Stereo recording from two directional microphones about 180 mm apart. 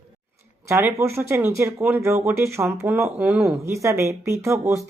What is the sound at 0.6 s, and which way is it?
Speech, 15° right (ahead or behind).